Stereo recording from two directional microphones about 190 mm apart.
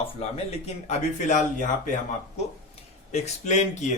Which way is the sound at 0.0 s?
30° left (ahead or behind).